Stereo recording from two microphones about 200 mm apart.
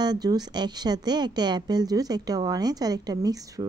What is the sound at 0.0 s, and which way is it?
Speech, 20° right (ahead or behind).